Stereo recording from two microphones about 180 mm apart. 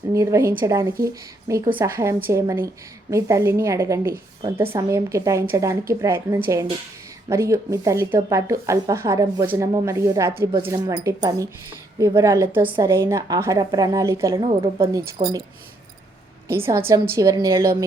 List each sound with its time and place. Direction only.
0.1 s a woman's voice: 15° right (ahead or behind)
16.5 s speech: 15° right (ahead or behind)